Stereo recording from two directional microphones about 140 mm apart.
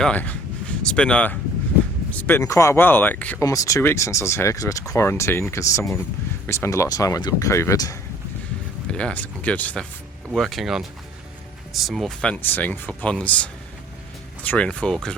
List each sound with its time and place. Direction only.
0.0 s a sound: 10° left (ahead or behind)
2.1 s speech: 15° left (ahead or behind)
3.4 s speech: 25° left (ahead or behind)
8.9 s speech: 5° left (ahead or behind)
10.3 s speech: centre (ahead or behind)